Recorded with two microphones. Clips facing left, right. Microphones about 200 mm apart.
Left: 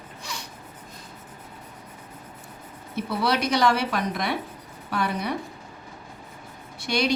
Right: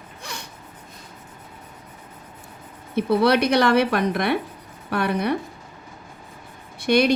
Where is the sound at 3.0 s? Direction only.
60° right (ahead or behind).